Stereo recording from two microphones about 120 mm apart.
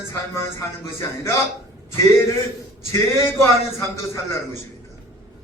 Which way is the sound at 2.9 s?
20° left (ahead or behind).